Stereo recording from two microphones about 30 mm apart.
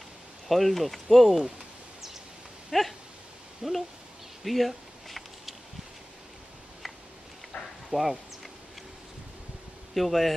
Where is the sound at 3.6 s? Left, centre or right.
Centre.